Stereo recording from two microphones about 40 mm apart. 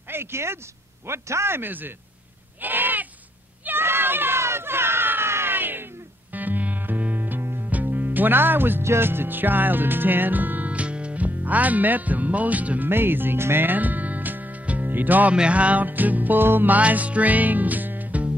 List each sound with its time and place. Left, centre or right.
0.1 s a man's voice: right
1.7 s music: right
2.6 s goat: right
3.6 s a sound: right
6.3 s music: right
7.7 s speech: right
10.7 s music: right
12.8 s speech: right
13.7 s music: right
14.9 s speech: right
15.3 s music: right